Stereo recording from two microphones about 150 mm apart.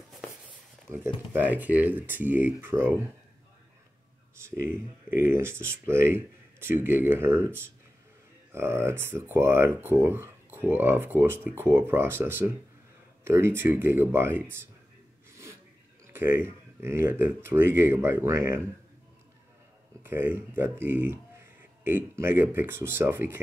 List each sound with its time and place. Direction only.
0.9 s speech: 15° right (ahead or behind)
4.6 s speech: 15° right (ahead or behind)
16.1 s speech: 15° right (ahead or behind)
20.0 s speech: 15° right (ahead or behind)